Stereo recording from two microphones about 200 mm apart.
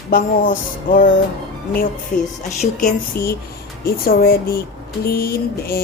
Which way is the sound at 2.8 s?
45° left (ahead or behind).